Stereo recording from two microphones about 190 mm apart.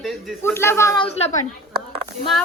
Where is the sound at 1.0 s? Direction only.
30° left (ahead or behind).